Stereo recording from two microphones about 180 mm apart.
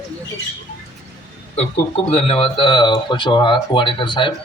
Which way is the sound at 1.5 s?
35° left (ahead or behind).